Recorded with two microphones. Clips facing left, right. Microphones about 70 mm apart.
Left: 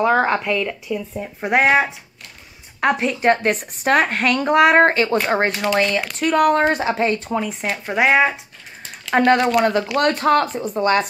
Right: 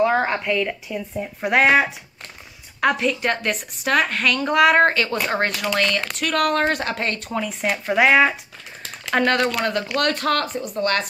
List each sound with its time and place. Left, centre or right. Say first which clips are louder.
0.0 s speech: left 2 dB; centre
0.6 s speech: left 1 dB; centre
1.1 s speech: even; centre
2.8 s speech: left 2 dB; left
7.6 s speech: right 1 dB; centre
7.9 s speech: even; centre